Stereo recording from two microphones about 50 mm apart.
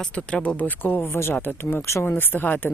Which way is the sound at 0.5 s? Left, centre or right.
Left.